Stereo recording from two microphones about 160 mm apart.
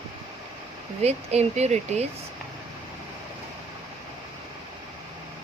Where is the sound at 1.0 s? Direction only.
45° right (ahead or behind).